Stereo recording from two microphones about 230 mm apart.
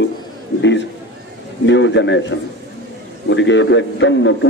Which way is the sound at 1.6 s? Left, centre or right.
Left.